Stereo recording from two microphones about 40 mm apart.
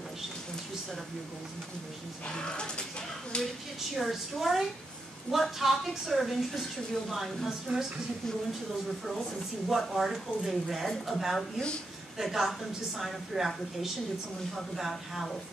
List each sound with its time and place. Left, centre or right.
2.2 s speech: left
3.9 s a woman's voice: centre
9.8 s a woman's voice: centre
14.5 s a woman's voice: centre